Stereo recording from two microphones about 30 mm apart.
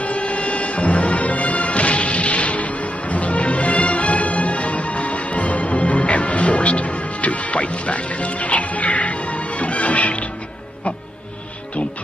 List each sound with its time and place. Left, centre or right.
0.0 s music: left